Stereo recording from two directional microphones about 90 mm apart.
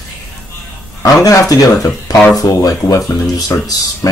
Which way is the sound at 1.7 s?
35° left (ahead or behind).